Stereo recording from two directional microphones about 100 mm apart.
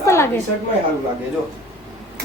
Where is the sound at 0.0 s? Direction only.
25° left (ahead or behind).